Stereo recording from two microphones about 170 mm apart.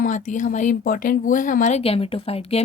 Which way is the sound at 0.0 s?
50° left (ahead or behind).